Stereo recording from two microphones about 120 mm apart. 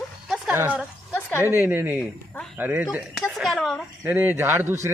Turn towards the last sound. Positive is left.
turn(degrees=-20)  # may be behind; listen again after turning